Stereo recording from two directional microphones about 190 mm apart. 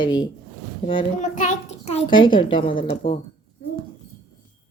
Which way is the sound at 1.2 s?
40° left (ahead or behind).